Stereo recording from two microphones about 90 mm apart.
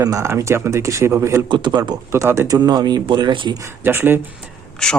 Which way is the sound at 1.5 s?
55° right (ahead or behind).